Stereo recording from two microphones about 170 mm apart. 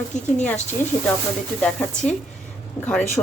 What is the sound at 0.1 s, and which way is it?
Speech, 45° left (ahead or behind).